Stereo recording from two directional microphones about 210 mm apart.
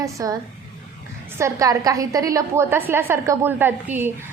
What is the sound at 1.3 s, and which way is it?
A woman's voice, 15° right (ahead or behind).